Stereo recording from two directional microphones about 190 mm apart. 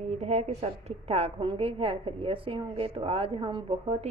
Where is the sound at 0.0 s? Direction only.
35° right (ahead or behind).